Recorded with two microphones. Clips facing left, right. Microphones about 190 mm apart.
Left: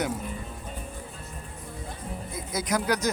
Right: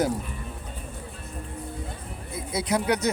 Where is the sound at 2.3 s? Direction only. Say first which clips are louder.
Right 3 dB; 30° right (ahead or behind).